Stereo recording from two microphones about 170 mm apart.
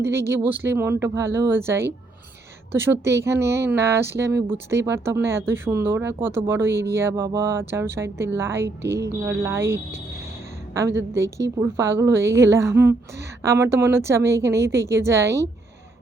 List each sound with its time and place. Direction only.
0.0 s speech: 15° right (ahead or behind)
11.1 s speech: 15° right (ahead or behind)